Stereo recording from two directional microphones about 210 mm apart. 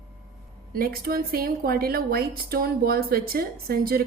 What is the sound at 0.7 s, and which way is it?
A woman's voice, 45° right (ahead or behind).